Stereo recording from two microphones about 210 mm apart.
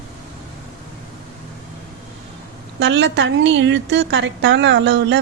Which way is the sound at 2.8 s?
60° right (ahead or behind).